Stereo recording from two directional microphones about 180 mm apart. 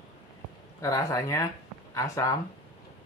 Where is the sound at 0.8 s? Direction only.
20° left (ahead or behind).